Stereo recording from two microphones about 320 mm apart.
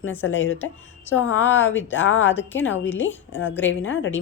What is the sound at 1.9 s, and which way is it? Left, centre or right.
Speech, left.